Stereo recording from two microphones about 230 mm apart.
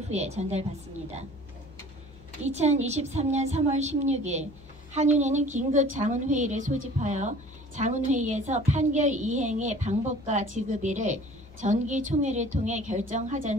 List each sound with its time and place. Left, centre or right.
0.1 s a woman's voice: right
2.4 s a woman's voice: right